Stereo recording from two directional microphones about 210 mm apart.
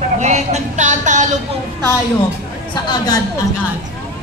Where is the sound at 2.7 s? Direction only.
20° left (ahead or behind).